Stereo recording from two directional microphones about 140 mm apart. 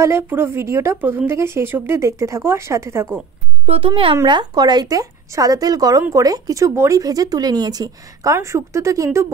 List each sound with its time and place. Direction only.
0.0 s speech: 15° right (ahead or behind)
3.6 s speech: 40° right (ahead or behind); by 9.3 s 20° right (ahead or behind)